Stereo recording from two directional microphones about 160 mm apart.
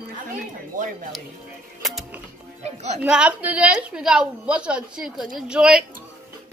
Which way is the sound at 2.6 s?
45° right (ahead or behind).